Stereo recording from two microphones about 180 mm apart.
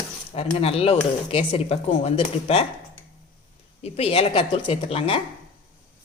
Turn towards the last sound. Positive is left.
turn(degrees=30)  # may be behind; listen again after turning